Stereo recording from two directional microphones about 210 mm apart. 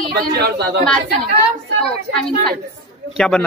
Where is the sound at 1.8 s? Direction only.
5° left (ahead or behind).